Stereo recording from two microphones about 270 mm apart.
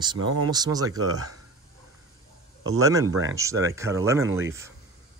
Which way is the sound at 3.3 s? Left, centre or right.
Centre.